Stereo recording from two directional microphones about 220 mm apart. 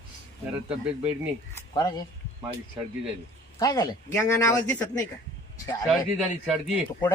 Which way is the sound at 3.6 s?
15° left (ahead or behind).